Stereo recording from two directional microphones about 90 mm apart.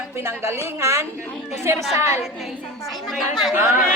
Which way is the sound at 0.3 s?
30° right (ahead or behind).